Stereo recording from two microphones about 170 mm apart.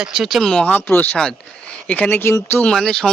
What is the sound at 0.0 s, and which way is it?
Speech, centre (ahead or behind).